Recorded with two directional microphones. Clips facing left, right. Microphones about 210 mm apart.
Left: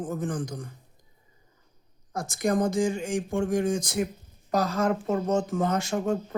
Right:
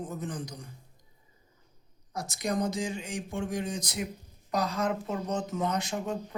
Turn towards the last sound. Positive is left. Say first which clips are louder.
# left 5 dB
turn(degrees=45)  # may be behind; listen again after turning